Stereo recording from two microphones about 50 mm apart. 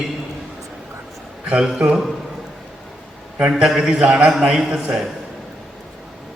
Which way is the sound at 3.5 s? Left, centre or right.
Centre.